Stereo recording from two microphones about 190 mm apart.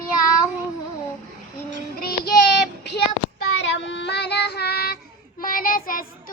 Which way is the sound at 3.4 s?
70° left (ahead or behind).